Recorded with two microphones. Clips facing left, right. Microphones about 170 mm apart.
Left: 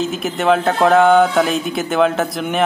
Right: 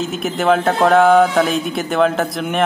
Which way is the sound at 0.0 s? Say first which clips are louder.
Even; centre (ahead or behind).